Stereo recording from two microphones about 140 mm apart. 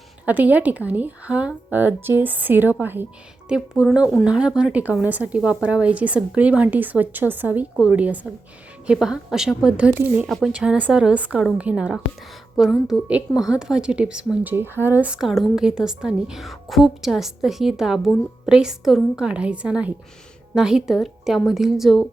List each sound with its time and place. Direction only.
0.3 s a woman's voice: 10° right (ahead or behind)
10.2 s a woman's voice: centre (ahead or behind)